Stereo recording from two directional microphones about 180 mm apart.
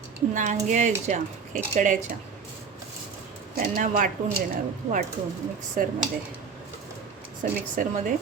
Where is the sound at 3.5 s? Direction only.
50° right (ahead or behind).